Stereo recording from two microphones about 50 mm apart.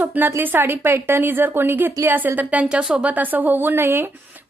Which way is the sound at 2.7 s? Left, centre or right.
Centre.